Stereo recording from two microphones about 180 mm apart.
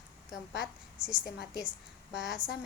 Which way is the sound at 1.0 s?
5° right (ahead or behind).